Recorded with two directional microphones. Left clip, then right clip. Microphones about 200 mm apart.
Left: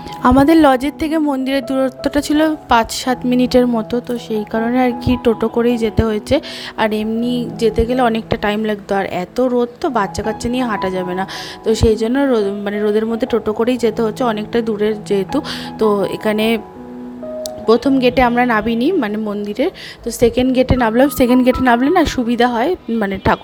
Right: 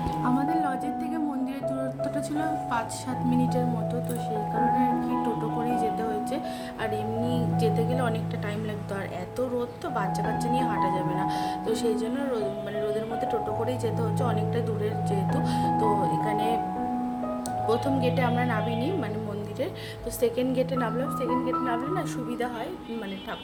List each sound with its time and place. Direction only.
0.3 s speech: 55° left (ahead or behind)
4.8 s speech: 45° left (ahead or behind)
17.7 s speech: 40° left (ahead or behind)